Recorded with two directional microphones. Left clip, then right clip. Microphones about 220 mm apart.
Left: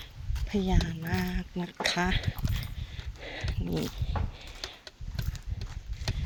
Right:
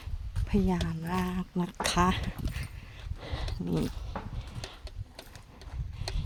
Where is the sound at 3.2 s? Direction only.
20° right (ahead or behind).